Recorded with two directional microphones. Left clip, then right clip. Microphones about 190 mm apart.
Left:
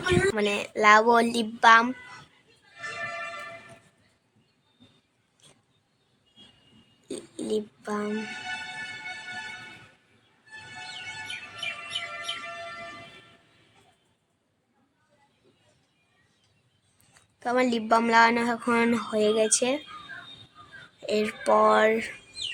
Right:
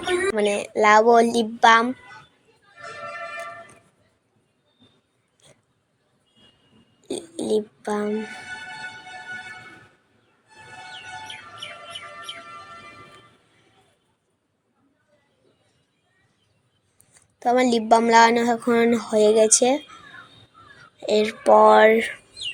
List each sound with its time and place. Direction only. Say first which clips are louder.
0.3 s speech: right 5 dB; 10° right (ahead or behind)
7.0 s a sound: right 7 dB; 10° right (ahead or behind)
17.4 s speech: right 6 dB; 15° right (ahead or behind)
21.0 s speech: right 7 dB; 15° right (ahead or behind)